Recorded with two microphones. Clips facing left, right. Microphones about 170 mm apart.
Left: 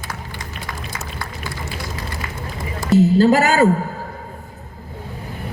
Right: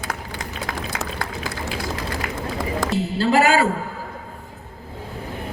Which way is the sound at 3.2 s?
40° left (ahead or behind).